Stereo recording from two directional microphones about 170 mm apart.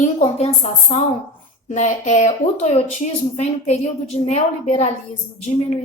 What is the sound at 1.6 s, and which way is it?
A woman's voice, 45° left (ahead or behind).